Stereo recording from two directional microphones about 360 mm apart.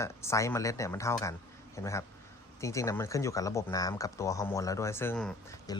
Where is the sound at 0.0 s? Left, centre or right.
Centre.